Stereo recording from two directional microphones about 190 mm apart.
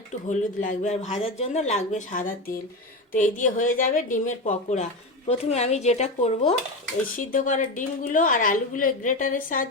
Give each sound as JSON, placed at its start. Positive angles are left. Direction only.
{"t": 0.3, "sound": "a woman's voice", "side_deg": 40}